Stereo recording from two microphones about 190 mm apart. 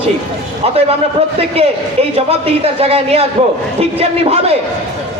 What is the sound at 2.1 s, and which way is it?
A man's voice, 30° right (ahead or behind).